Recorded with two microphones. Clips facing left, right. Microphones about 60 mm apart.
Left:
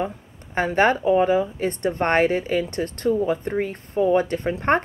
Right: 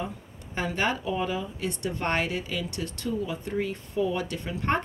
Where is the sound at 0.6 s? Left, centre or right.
Left.